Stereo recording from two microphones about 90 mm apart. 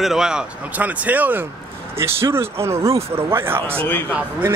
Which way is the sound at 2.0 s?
30° right (ahead or behind).